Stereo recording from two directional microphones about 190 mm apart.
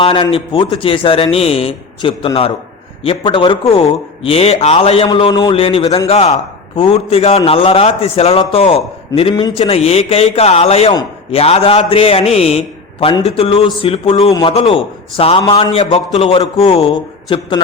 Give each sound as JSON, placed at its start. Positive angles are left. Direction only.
{"t": 0.0, "sound": "a man's voice", "side_deg": 30}